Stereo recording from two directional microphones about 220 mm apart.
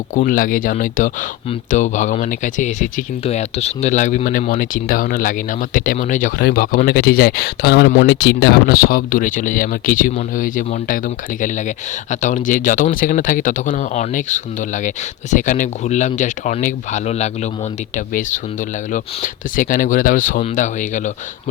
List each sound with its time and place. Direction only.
0.1 s speech: 40° left (ahead or behind)